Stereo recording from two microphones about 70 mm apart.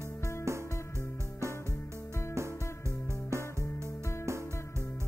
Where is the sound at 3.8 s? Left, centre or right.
Left.